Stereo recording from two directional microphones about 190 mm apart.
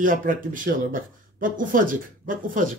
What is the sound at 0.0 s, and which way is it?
Speech, 45° right (ahead or behind).